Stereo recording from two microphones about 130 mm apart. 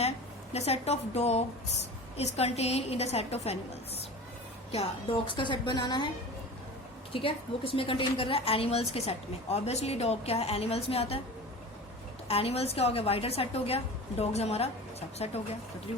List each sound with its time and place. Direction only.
0.5 s a woman's voice: 55° left (ahead or behind)
5.4 s a woman's voice: 35° left (ahead or behind)
7.1 s a woman's voice: 45° left (ahead or behind)
12.3 s a woman's voice: 50° left (ahead or behind)